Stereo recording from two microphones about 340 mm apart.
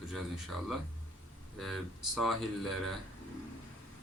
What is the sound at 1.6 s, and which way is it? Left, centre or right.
Speech, centre.